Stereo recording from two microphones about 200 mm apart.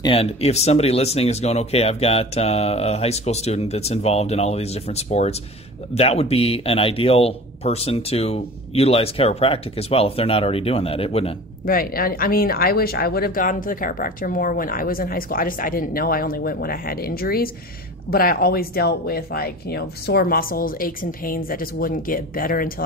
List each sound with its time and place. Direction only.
0.0 s speech: 30° left (ahead or behind)
11.6 s speech: 45° left (ahead or behind)